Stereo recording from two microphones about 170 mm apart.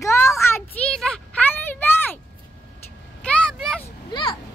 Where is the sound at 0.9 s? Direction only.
5° left (ahead or behind).